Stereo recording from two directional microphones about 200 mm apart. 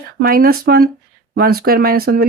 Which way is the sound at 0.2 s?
45° right (ahead or behind).